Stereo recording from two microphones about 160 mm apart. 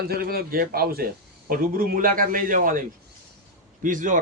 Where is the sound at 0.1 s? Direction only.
70° right (ahead or behind).